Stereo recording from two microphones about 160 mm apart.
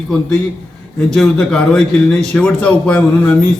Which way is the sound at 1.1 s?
5° left (ahead or behind).